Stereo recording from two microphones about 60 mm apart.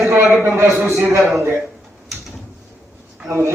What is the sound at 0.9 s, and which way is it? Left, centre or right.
Speech, right.